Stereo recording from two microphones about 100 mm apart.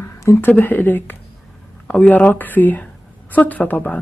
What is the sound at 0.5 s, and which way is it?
Speech, 15° left (ahead or behind).